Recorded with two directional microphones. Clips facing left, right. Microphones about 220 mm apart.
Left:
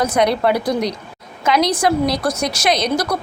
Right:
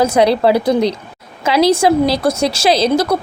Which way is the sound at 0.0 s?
30° right (ahead or behind).